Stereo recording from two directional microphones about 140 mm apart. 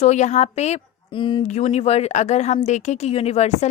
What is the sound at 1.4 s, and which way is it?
A woman's voice, 55° left (ahead or behind).